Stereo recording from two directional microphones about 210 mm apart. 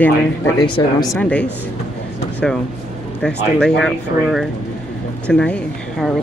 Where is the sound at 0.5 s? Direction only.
25° left (ahead or behind).